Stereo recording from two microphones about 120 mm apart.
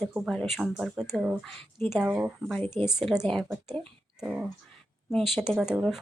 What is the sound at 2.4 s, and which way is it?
Speech, 5° left (ahead or behind).